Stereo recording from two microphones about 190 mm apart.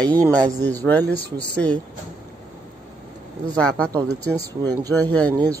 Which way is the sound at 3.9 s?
15° right (ahead or behind).